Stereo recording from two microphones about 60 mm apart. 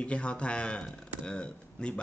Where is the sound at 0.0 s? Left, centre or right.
Centre.